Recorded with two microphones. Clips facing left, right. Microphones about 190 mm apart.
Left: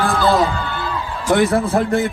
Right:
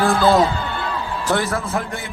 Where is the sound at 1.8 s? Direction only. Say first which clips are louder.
Left 9 dB; 55° left (ahead or behind).